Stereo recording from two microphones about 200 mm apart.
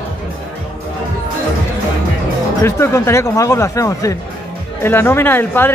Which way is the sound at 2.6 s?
15° left (ahead or behind).